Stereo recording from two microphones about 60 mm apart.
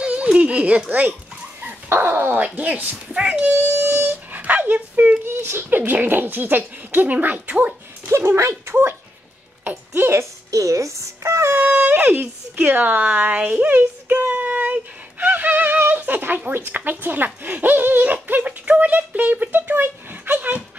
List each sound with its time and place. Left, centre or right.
0.0 s speech: centre
1.7 s dog: right
2.3 s speech: right
3.5 s dog: right
5.2 s speech: right
8.4 s speech: right
9.7 s a woman's voice: right
10.5 s speech: right
11.5 s speech: right
19.7 s a sound: right